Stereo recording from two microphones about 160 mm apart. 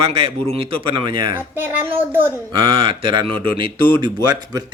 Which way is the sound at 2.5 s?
30° right (ahead or behind).